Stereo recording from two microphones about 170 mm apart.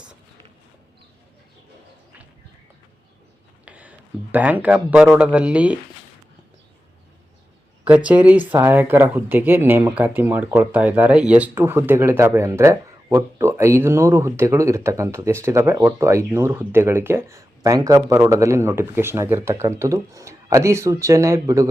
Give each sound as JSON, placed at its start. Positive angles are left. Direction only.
{"t": 3.7, "sound": "speech", "side_deg": -10}
{"t": 7.9, "sound": "speech", "side_deg": -10}